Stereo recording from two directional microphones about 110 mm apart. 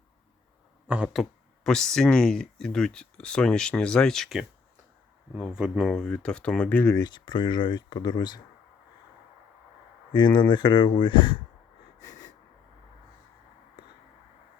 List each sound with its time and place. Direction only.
0.9 s speech: 10° right (ahead or behind)
5.5 s speech: 5° right (ahead or behind)
5.9 s speech: 5° left (ahead or behind)
6.9 s speech: 40° left (ahead or behind)
10.1 s speech: 45° left (ahead or behind)